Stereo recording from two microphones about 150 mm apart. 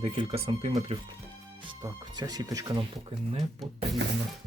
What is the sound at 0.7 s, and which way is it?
Speech, 30° right (ahead or behind).